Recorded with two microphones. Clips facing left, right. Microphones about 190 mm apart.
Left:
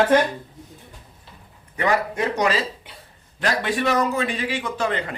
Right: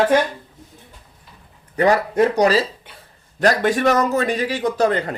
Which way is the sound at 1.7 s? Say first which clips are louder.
Right 5 dB; 40° right (ahead or behind).